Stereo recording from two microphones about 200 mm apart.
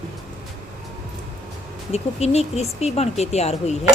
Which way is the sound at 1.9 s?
30° left (ahead or behind).